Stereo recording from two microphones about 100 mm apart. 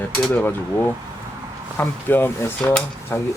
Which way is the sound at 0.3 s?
20° left (ahead or behind).